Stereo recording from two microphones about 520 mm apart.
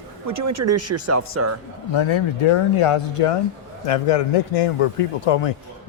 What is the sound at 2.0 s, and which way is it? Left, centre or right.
Speech, left.